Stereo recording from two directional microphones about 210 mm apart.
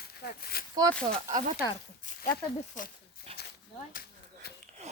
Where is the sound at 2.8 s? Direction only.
40° left (ahead or behind).